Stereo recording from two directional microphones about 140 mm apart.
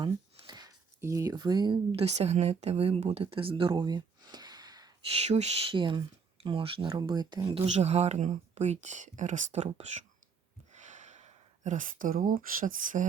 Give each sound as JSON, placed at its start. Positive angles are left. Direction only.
{"t": 0.0, "sound": "speech", "side_deg": -30}
{"t": 5.1, "sound": "speech", "side_deg": -50}
{"t": 5.7, "sound": "speech", "side_deg": -35}
{"t": 7.6, "sound": "speech", "side_deg": -50}
{"t": 10.7, "sound": "a sound", "side_deg": -60}